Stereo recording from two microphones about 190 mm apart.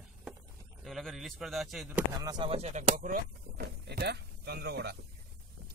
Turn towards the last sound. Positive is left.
turn(degrees=-60)  # may be behind; listen again after turning